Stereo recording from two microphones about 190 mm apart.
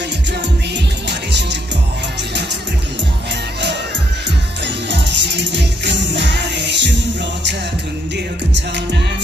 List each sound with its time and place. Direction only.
1.0 s music: 65° right (ahead or behind)
4.6 s music: 70° right (ahead or behind)
8.5 s music: 65° right (ahead or behind)